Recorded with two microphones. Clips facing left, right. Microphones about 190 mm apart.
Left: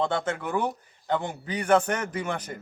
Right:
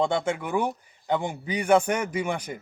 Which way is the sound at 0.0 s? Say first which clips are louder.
Right 2 dB; 10° right (ahead or behind).